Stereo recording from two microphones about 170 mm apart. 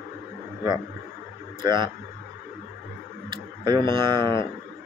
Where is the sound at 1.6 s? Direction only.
25° right (ahead or behind).